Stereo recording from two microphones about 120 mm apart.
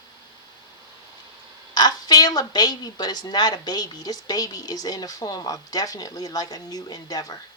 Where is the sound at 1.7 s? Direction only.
35° left (ahead or behind).